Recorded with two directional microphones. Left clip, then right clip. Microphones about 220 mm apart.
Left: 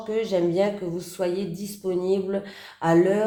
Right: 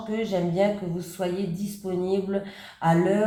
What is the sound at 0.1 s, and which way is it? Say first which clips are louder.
Speech: left 4 dB; 45° left (ahead or behind).